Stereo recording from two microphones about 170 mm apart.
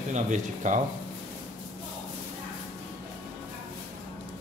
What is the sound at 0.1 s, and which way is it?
Speech, 45° right (ahead or behind).